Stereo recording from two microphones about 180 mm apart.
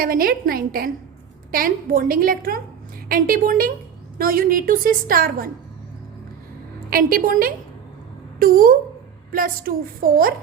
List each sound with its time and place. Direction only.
0.0 s a woman's voice: 55° right (ahead or behind)
6.9 s a woman's voice: 55° right (ahead or behind)